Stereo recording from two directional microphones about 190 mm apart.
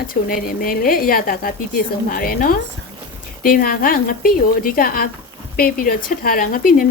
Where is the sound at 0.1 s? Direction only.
50° left (ahead or behind).